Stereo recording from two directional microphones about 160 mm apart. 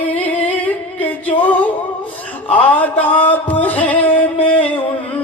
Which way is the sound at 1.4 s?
10° left (ahead or behind).